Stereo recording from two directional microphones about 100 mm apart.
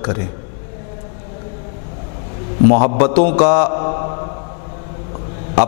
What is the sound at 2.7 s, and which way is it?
Mantra, 15° left (ahead or behind).